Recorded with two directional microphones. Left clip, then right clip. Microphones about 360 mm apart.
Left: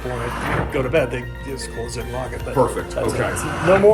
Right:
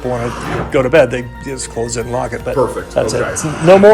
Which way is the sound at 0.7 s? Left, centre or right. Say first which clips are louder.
Right 12 dB; centre.